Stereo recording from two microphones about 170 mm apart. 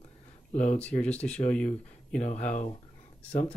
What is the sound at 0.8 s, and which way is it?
Speech, 5° left (ahead or behind).